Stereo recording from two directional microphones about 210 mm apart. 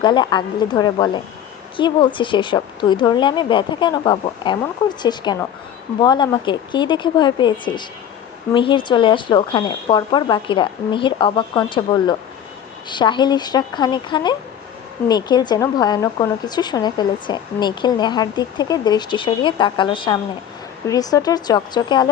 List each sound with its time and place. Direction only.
0.0 s speech: 20° left (ahead or behind)